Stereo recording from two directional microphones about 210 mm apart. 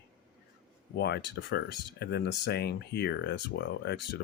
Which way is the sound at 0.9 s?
50° left (ahead or behind).